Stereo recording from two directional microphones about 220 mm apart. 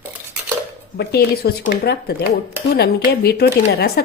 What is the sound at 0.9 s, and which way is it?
Speech, 45° left (ahead or behind).